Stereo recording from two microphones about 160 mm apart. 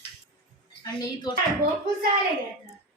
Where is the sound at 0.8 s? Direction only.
25° left (ahead or behind).